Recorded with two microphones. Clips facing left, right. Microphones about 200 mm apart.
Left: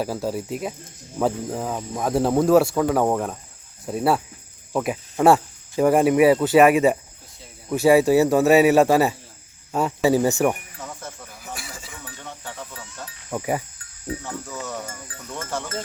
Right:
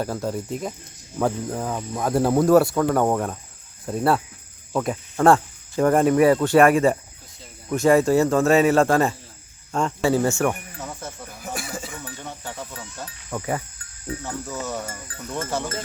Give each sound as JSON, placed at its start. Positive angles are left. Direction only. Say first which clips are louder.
{"t": 0.0, "sound": "speech", "louder": "left 1 dB", "side_deg": 5}
{"t": 10.8, "sound": "cricket", "louder": "right 2 dB", "side_deg": -5}
{"t": 11.5, "sound": "chink", "louder": "right 7 dB", "side_deg": -50}
{"t": 12.2, "sound": "music", "louder": "left 1 dB", "side_deg": -10}
{"t": 13.3, "sound": "speech", "louder": "left 2 dB", "side_deg": 15}
{"t": 14.3, "sound": "speech", "louder": "right 2 dB", "side_deg": -5}